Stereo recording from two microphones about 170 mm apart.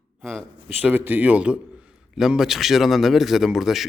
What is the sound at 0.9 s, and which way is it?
A man's voice, 10° right (ahead or behind).